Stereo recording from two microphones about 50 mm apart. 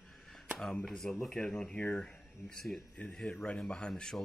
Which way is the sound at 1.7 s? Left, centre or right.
Left.